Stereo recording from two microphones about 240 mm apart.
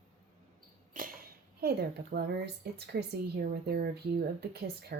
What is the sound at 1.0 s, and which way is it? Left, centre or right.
A woman's voice, right.